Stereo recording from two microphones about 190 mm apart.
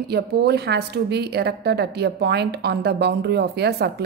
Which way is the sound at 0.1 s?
60° right (ahead or behind).